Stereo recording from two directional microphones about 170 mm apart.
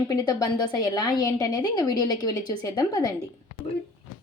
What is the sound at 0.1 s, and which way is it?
A woman's voice, 20° left (ahead or behind).